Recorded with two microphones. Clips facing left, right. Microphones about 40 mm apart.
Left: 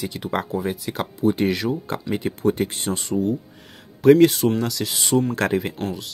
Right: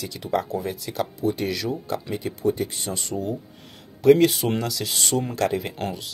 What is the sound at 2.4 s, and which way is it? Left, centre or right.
Speech, left.